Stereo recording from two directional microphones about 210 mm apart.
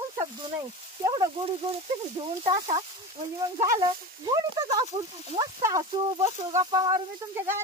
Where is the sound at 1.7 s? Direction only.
25° right (ahead or behind).